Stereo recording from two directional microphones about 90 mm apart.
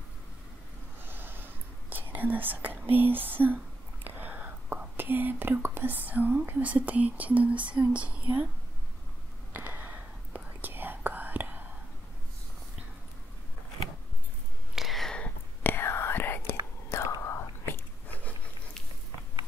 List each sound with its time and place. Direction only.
1.0 s speech: 20° right (ahead or behind)
9.5 s whispering: 20° right (ahead or behind)
14.8 s whispering: centre (ahead or behind); by 17.8 s 30° left (ahead or behind)
18.0 s a sound: 15° left (ahead or behind)